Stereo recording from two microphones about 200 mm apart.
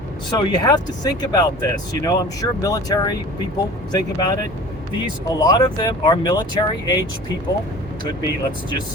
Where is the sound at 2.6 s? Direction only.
20° left (ahead or behind).